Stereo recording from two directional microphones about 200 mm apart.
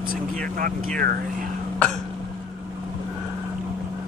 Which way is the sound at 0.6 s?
45° right (ahead or behind).